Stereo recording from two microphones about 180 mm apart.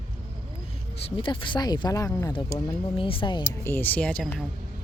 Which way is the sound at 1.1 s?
25° left (ahead or behind).